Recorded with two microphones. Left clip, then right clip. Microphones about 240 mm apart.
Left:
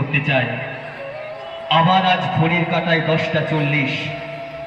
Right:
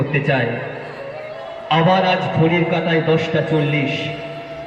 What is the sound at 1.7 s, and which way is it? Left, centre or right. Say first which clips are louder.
A man's voice: even; centre.